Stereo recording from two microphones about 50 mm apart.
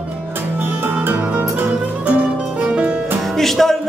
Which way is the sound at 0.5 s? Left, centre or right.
Right.